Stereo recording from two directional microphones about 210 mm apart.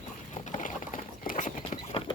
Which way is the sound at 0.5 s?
40° left (ahead or behind).